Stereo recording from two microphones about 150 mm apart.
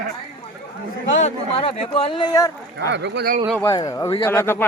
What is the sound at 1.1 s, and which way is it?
Speech, 50° left (ahead or behind).